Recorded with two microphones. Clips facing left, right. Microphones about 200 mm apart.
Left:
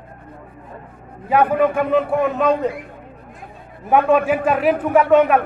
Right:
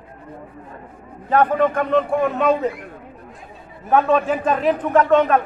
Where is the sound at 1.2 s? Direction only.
10° left (ahead or behind).